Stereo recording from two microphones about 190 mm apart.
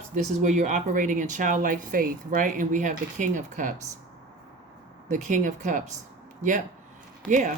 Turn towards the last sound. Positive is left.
turn(degrees=5)  # may be behind; listen again after turning